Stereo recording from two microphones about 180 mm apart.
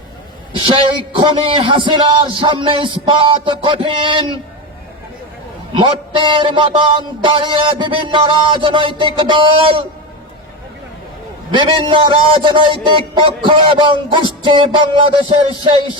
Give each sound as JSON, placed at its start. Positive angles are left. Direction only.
{"t": 0.6, "sound": "a man's voice", "side_deg": -30}
{"t": 5.7, "sound": "a man's voice", "side_deg": -25}
{"t": 11.5, "sound": "a man's voice", "side_deg": -25}